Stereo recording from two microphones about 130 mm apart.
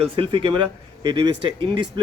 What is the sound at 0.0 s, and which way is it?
Speech, 45° right (ahead or behind).